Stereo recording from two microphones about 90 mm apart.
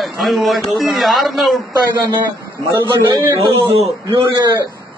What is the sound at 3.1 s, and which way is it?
Speech, 50° right (ahead or behind).